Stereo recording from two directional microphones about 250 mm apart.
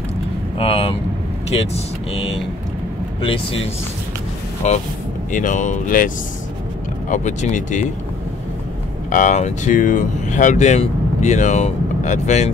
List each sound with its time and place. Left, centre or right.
0.6 s speech: left
4.6 s speech: left
9.1 s speech: left